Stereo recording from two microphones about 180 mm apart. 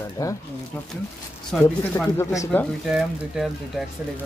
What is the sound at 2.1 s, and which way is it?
Speech, 15° left (ahead or behind).